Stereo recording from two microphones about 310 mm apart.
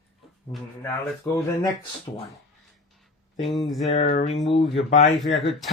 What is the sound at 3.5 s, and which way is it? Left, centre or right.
Speech, centre.